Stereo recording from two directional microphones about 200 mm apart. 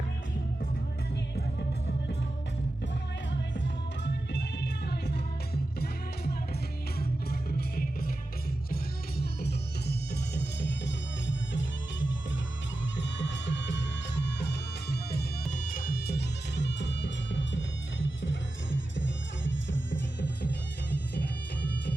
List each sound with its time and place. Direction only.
1.1 s music: 55° left (ahead or behind)
4.0 s music: 60° left (ahead or behind)
15.4 s music: 40° left (ahead or behind); by 19.0 s 70° left (ahead or behind)